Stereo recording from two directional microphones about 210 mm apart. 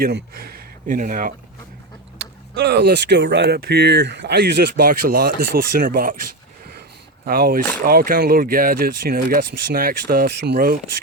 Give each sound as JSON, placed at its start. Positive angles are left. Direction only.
{"t": 0.0, "sound": "speech", "side_deg": -45}
{"t": 2.1, "sound": "speech", "side_deg": -50}
{"t": 7.3, "sound": "speech", "side_deg": -45}